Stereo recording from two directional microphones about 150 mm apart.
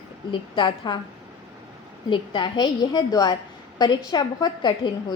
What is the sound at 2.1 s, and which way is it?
A woman's voice, 30° left (ahead or behind).